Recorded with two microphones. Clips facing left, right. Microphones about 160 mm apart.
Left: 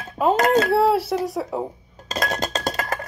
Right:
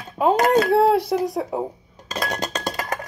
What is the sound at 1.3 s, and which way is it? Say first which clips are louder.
Speech: right 1 dB; 15° right (ahead or behind).